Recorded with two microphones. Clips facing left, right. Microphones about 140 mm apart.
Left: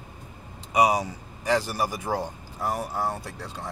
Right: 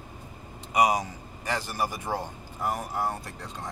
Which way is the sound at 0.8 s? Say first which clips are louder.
Left 2 dB; 10° left (ahead or behind).